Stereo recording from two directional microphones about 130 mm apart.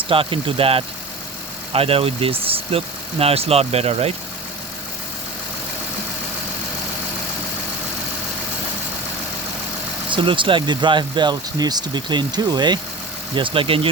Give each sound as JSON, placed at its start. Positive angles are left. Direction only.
{"t": 0.1, "sound": "speech", "side_deg": -45}
{"t": 10.1, "sound": "speech", "side_deg": -40}